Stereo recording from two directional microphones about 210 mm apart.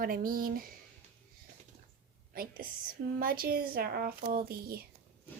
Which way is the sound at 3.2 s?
45° right (ahead or behind).